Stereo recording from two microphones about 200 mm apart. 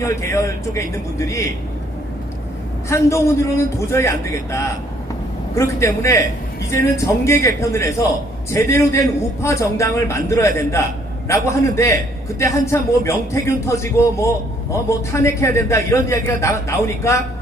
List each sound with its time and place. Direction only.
0.0 s a man's voice: 15° left (ahead or behind)
2.9 s a man's voice: 15° left (ahead or behind)